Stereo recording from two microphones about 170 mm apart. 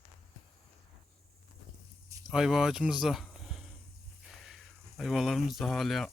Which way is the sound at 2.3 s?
5° right (ahead or behind).